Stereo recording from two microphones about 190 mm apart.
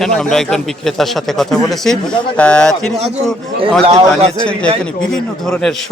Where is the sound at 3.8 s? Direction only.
30° right (ahead or behind).